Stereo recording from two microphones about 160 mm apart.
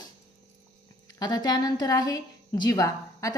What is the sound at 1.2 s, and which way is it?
A woman's voice, 25° left (ahead or behind).